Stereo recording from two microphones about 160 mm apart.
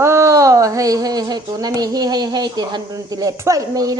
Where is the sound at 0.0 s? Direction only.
20° right (ahead or behind).